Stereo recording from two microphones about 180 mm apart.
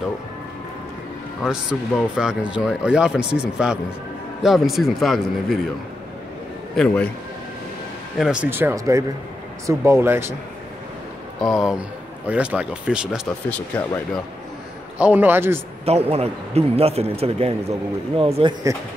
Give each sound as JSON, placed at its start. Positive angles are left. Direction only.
{"t": 1.4, "sound": "speech", "side_deg": -5}
{"t": 6.7, "sound": "a man's voice", "side_deg": 5}
{"t": 8.2, "sound": "speech", "side_deg": -5}
{"t": 11.4, "sound": "speech", "side_deg": -5}
{"t": 15.0, "sound": "speech", "side_deg": -10}
{"t": 15.8, "sound": "a man's voice", "side_deg": -35}